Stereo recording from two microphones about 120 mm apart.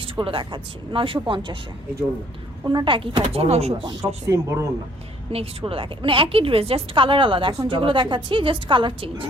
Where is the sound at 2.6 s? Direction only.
45° right (ahead or behind); by 3.7 s 60° right (ahead or behind).